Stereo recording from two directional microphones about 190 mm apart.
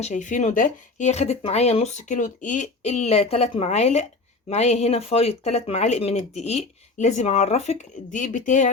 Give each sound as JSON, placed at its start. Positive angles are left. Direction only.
{"t": 0.0, "sound": "speech", "side_deg": 40}